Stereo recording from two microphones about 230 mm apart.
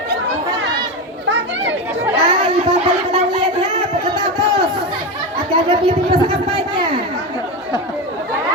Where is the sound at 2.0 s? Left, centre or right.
Right.